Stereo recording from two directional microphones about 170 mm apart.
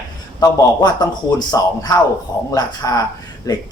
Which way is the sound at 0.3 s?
25° left (ahead or behind).